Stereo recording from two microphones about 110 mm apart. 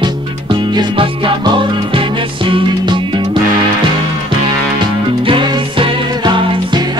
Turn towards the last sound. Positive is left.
turn(degrees=-45)  # may be behind; listen again after turning